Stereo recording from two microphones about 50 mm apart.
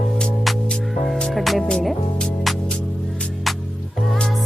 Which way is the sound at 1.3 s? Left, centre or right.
Centre.